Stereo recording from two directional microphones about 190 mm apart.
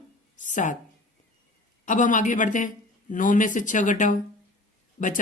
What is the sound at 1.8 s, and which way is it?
Speech, 40° left (ahead or behind).